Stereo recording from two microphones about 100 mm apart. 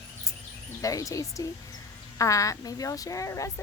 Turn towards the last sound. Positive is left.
turn(degrees=30)  # may be behind; listen again after turning